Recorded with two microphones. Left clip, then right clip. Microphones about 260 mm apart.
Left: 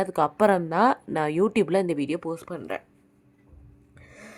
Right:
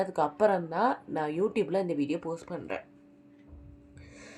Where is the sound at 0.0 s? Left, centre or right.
Left.